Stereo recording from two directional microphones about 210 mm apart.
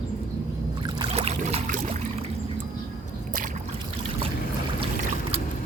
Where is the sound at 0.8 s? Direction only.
20° right (ahead or behind).